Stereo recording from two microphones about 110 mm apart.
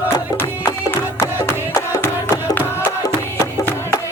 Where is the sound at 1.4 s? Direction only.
25° left (ahead or behind).